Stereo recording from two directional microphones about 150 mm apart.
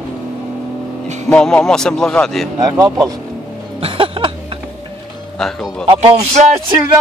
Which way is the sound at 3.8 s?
35° right (ahead or behind).